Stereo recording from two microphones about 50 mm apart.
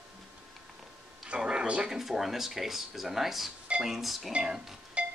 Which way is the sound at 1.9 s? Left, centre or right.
Centre.